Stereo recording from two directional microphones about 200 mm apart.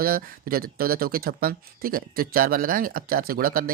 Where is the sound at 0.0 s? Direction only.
45° right (ahead or behind).